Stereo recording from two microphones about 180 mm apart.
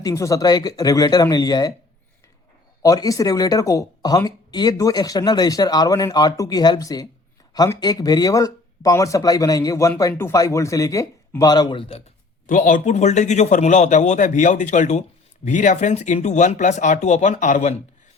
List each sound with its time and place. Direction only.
0.0 s speech: 20° left (ahead or behind)
2.8 s speech: 20° left (ahead or behind)
12.5 s speech: 45° left (ahead or behind)